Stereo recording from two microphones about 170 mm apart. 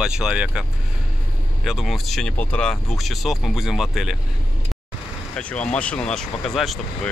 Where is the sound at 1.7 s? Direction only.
Centre (ahead or behind).